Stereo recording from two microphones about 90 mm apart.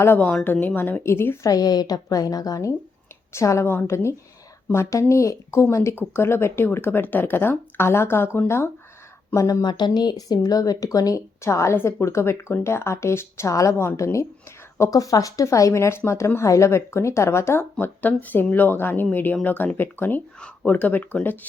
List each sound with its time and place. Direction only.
0.0 s speech: 20° left (ahead or behind)
1.5 s a woman's voice: 45° left (ahead or behind)
9.6 s a woman's voice: 55° left (ahead or behind); by 21.3 s 20° left (ahead or behind)